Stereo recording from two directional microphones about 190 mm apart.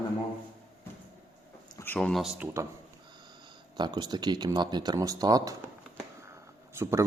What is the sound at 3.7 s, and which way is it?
Speech, 20° right (ahead or behind).